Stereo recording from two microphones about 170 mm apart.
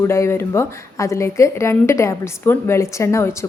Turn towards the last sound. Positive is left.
turn(degrees=15)  # may be behind; listen again after turning